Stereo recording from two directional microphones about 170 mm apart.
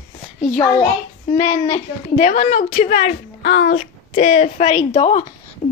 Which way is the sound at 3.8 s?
40° left (ahead or behind).